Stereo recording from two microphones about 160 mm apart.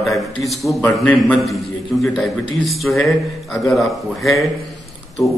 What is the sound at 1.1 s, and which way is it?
A man's voice, centre (ahead or behind).